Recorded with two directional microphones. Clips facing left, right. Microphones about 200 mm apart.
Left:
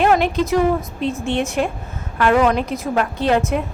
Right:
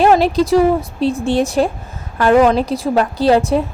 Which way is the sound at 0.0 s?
35° right (ahead or behind).